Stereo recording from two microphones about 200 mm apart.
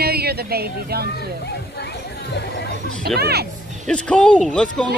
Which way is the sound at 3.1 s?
55° right (ahead or behind).